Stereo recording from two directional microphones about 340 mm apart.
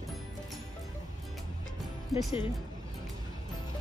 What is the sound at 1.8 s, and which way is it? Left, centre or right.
Music, centre.